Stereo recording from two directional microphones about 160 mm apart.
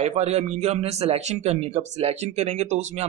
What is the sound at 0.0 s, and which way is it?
A man's voice, 45° right (ahead or behind).